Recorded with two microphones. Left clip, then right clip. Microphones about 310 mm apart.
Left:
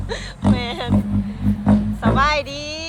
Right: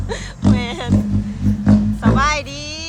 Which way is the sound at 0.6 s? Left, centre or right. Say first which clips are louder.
Even; centre.